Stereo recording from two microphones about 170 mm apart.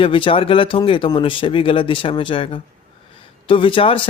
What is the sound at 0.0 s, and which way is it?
Speech, 30° left (ahead or behind).